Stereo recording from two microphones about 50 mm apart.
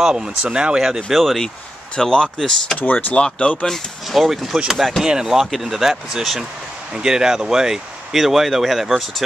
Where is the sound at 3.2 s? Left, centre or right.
Left.